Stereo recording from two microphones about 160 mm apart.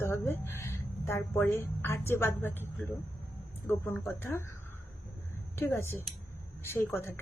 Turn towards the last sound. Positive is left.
turn(degrees=15)  # may be behind; listen again after turning